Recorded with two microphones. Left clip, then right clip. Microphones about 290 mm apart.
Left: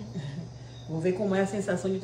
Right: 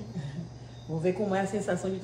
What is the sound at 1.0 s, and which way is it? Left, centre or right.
Speech, centre.